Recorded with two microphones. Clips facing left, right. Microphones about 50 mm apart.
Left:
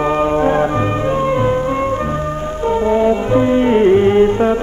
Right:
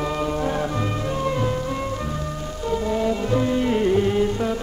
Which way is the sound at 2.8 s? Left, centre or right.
Left.